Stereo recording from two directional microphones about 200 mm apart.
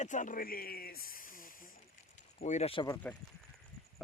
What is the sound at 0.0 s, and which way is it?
Speech, 40° left (ahead or behind).